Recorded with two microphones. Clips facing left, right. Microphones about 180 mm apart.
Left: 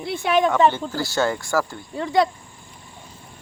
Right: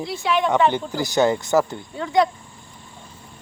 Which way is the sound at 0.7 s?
15° right (ahead or behind).